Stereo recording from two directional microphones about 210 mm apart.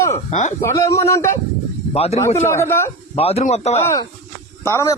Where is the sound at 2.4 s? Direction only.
10° left (ahead or behind).